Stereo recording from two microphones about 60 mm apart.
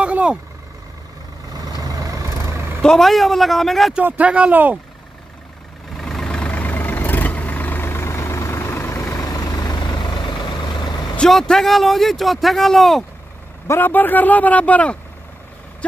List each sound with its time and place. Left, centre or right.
0.0 s vehicle: centre
1.8 s vehicle: right
2.8 s speech: centre
4.0 s speech: right
5.9 s vehicle: centre; by 9.2 s left
9.2 s vehicle: left
11.1 s speech: centre
13.7 s speech: left